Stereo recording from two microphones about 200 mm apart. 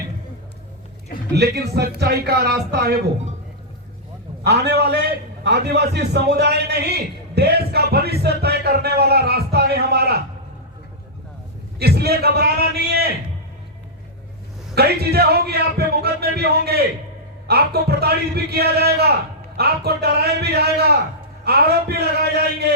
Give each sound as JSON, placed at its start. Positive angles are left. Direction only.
{"t": 1.4, "sound": "a man's voice", "side_deg": -55}
{"t": 4.4, "sound": "a man's voice", "side_deg": -55}
{"t": 11.8, "sound": "a man's voice", "side_deg": -55}
{"t": 14.8, "sound": "a man's voice", "side_deg": -50}